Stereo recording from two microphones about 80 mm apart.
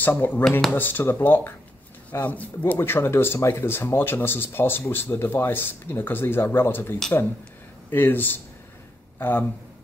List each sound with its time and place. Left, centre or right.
0.0 s speech: left
0.4 s speech: centre
0.7 s speech: left